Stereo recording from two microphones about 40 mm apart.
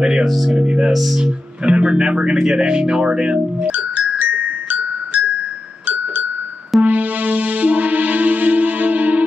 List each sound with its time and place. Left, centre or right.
0.2 s speech: centre
0.6 s speech: right
0.9 s speech: centre
1.2 s speech: right
3.6 s music: right
6.8 s music: right